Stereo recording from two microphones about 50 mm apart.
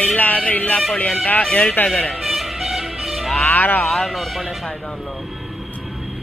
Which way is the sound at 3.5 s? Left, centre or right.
Left.